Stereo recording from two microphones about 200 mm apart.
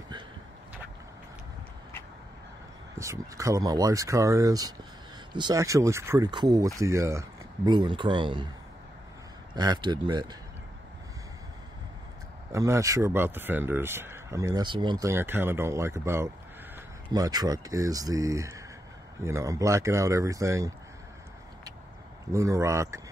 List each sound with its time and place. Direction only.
3.0 s speech: 15° right (ahead or behind)
9.6 s speech: 20° right (ahead or behind)
12.5 s speech: 15° right (ahead or behind)
22.3 s speech: 15° right (ahead or behind)